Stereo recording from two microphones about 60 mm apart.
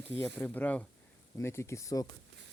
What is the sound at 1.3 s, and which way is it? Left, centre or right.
Speech, left.